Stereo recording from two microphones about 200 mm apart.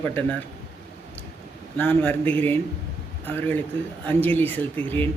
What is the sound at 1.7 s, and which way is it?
Speech, 10° left (ahead or behind).